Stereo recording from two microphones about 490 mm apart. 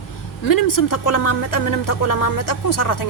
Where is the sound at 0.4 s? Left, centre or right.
Left.